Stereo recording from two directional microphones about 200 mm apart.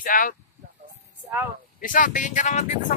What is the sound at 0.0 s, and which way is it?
Speech, 45° left (ahead or behind).